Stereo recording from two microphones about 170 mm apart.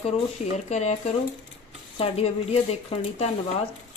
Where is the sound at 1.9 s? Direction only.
35° left (ahead or behind).